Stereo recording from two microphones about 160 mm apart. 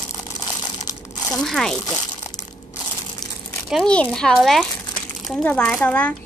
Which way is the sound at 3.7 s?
5° left (ahead or behind).